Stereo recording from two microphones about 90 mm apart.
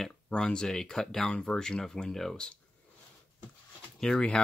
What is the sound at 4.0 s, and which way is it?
Speech, 10° left (ahead or behind).